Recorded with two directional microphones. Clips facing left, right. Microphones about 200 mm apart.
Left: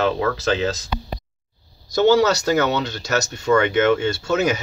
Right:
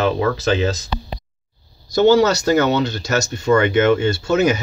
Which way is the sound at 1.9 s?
Centre (ahead or behind).